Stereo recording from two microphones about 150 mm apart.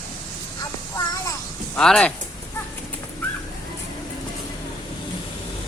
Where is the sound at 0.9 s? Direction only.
20° left (ahead or behind).